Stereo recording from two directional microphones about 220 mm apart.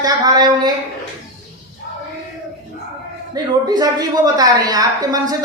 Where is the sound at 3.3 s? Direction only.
15° right (ahead or behind).